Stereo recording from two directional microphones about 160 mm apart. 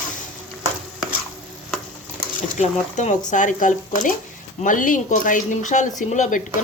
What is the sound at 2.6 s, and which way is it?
Speech, 45° left (ahead or behind).